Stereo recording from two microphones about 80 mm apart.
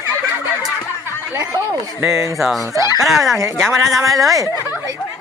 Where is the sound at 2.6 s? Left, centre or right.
Right.